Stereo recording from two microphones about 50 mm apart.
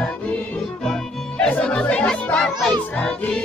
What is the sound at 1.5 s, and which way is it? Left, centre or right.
Speech, left.